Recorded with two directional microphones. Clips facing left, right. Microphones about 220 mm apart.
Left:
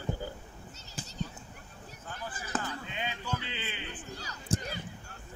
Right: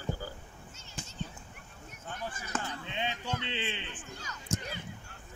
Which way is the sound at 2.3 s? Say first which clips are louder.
Left 5 dB; 30° left (ahead or behind).